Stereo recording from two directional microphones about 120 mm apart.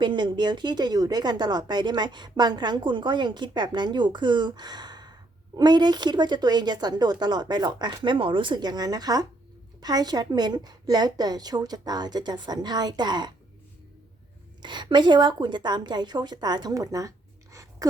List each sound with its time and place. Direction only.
0.0 s speech: 40° right (ahead or behind)
14.6 s a woman's voice: 40° right (ahead or behind)